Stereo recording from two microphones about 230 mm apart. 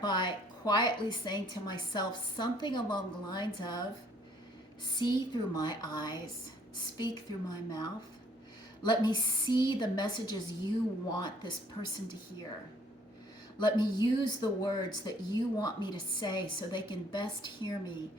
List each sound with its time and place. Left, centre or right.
0.0 s speech: centre
4.9 s a woman's voice: centre
13.6 s speech: centre